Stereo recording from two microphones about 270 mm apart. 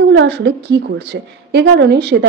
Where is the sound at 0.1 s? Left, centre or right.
Right.